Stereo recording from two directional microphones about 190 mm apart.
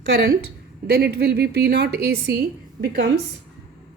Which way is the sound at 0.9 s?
60° right (ahead or behind).